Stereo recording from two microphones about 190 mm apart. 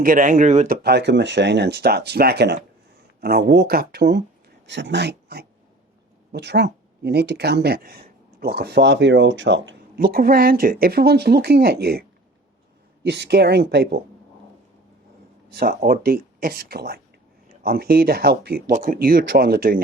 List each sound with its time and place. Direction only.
0.0 s speech: 45° right (ahead or behind)
0.8 s speech: 60° right (ahead or behind)
4.6 s speech: 70° right (ahead or behind)
10.0 s speech: 50° right (ahead or behind)
15.5 s speech: 50° right (ahead or behind)